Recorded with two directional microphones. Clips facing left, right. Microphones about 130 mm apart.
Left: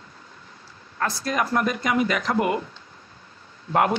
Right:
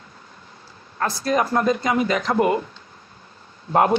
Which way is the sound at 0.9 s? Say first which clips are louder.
Right 4 dB; 30° right (ahead or behind).